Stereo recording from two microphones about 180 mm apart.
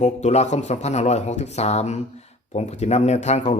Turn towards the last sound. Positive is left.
turn(degrees=40)  # may be behind; listen again after turning